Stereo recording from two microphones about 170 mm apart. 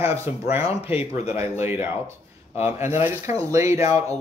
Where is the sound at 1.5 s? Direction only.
15° right (ahead or behind).